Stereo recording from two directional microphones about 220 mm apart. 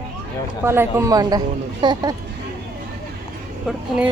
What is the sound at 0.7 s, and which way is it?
A man's voice, 10° right (ahead or behind).